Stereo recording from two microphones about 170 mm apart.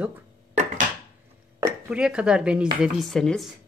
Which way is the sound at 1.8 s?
5° right (ahead or behind).